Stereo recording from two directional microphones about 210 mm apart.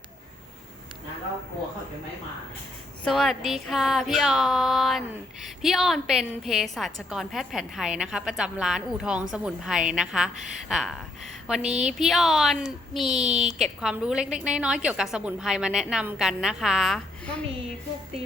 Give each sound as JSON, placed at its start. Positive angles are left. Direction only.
{"t": 3.0, "sound": "speech", "side_deg": 0}
{"t": 11.6, "sound": "a woman's voice", "side_deg": -35}
{"t": 11.9, "sound": "speech", "side_deg": 0}
{"t": 13.1, "sound": "a woman's voice", "side_deg": -30}
{"t": 13.5, "sound": "speech", "side_deg": 0}